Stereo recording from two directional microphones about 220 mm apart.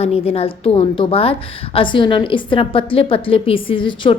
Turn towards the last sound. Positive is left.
turn(degrees=20)  # may be behind; listen again after turning